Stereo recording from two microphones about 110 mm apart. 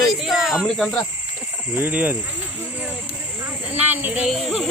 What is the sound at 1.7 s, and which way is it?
Speech, 15° right (ahead or behind).